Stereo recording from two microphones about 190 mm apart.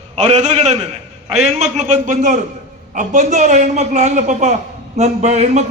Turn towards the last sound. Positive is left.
turn(degrees=-35)  # may be behind; listen again after turning